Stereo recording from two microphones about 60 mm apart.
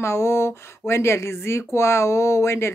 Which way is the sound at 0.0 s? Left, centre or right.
Left.